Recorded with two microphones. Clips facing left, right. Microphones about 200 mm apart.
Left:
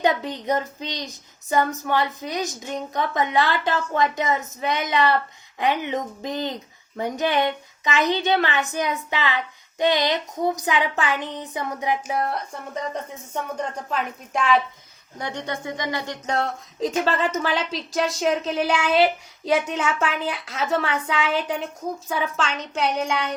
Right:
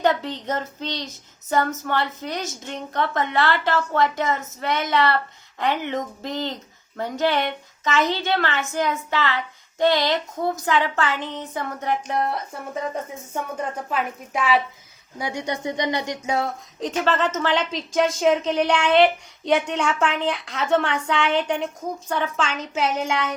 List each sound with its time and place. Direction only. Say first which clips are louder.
0.0 s a woman's voice: right 1 dB; 15° left (ahead or behind); by 15.5 s 10° right (ahead or behind)
15.6 s speech: right 4 dB; 20° right (ahead or behind)
16.8 s speech: even; 10° left (ahead or behind)